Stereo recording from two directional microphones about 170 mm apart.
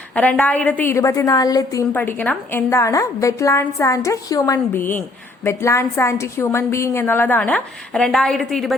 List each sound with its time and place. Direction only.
0.1 s a woman's voice: 5° left (ahead or behind)
1.9 s a woman's voice: 10° left (ahead or behind)